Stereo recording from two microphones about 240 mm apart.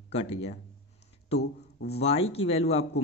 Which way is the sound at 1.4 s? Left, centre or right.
Left.